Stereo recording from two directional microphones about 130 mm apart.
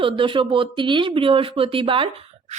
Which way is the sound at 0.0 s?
40° right (ahead or behind).